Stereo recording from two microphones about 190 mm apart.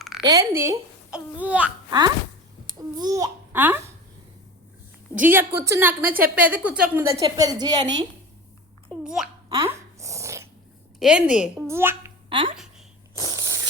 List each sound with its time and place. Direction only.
0.2 s a child's voice: 20° right (ahead or behind)
2.9 s a child's voice: 20° right (ahead or behind)
5.2 s a child's voice: 10° right (ahead or behind)
9.0 s a child's voice: 5° right (ahead or behind)
9.5 s dog: 15° right (ahead or behind)
11.0 s a woman's voice: 5° right (ahead or behind)
12.3 s speech: 25° right (ahead or behind)
13.1 s a sound: 15° right (ahead or behind)